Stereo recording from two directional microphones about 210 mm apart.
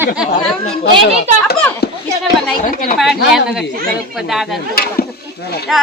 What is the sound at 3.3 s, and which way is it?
Speech, centre (ahead or behind).